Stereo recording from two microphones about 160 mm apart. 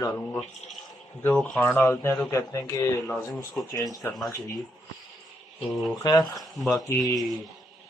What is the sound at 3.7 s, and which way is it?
Speech, 20° left (ahead or behind).